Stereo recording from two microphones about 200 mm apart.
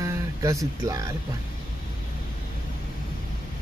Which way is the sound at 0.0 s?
15° right (ahead or behind).